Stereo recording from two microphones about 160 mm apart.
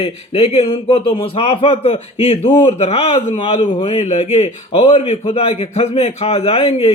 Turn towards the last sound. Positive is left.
turn(degrees=40)  # may be behind; listen again after turning